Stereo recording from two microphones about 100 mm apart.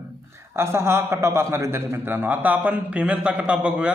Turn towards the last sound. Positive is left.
turn(degrees=-15)  # may be behind; listen again after turning